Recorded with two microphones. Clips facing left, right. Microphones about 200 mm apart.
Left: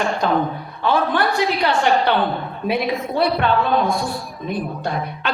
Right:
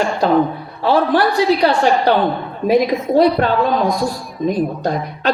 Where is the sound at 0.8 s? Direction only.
35° right (ahead or behind).